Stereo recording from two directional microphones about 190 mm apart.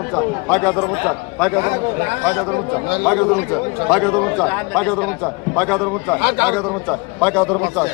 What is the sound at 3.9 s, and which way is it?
A man's voice, 5° left (ahead or behind).